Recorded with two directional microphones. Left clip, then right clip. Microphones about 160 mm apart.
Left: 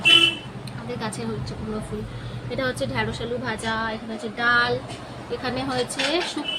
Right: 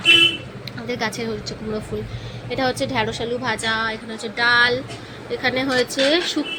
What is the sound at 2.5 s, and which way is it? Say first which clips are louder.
Speech: right 4 dB; 30° right (ahead or behind).